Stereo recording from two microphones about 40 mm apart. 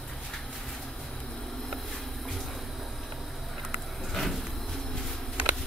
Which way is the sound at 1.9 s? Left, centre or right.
Centre.